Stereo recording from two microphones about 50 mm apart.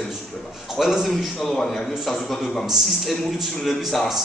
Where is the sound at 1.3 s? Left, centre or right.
Centre.